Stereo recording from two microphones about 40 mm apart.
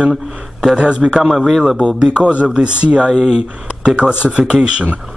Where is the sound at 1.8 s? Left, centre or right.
Right.